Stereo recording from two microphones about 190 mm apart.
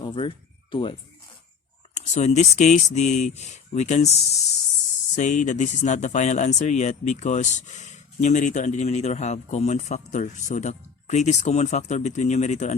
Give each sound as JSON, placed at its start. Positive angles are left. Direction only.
{"t": 0.0, "sound": "speech", "side_deg": 25}
{"t": 2.0, "sound": "speech", "side_deg": 35}